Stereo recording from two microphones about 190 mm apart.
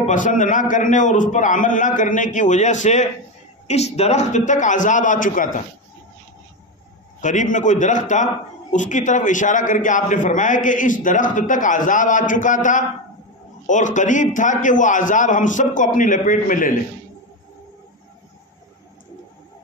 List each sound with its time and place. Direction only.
0.0 s a man's voice: 40° left (ahead or behind)
7.2 s a man's voice: 40° left (ahead or behind)